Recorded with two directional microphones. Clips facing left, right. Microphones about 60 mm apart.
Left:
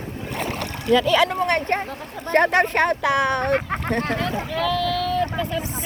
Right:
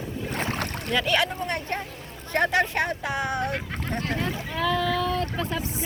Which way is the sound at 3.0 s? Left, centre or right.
Left.